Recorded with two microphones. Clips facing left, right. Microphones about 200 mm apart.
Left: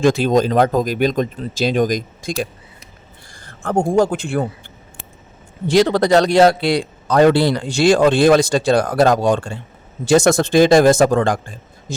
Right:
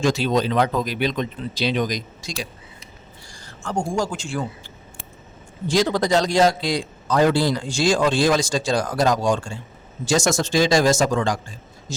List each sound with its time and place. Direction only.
0.0 s speech: 50° left (ahead or behind)
5.6 s a man's voice: 65° left (ahead or behind)